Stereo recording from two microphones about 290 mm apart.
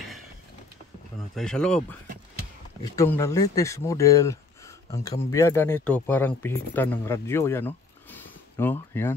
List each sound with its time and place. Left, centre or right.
1.3 s speech: centre